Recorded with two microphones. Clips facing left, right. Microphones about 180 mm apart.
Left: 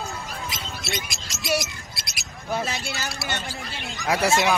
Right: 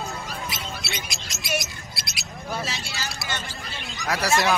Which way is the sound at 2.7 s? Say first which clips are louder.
Left 3 dB; 55° left (ahead or behind).